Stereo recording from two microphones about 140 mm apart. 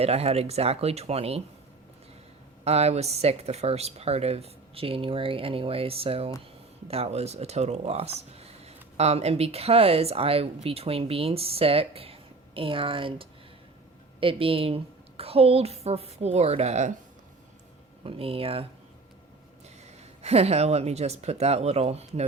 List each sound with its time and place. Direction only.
0.0 s speech: 45° right (ahead or behind)
2.6 s a woman's voice: 50° right (ahead or behind)
18.0 s speech: 40° right (ahead or behind)
20.2 s speech: 45° right (ahead or behind)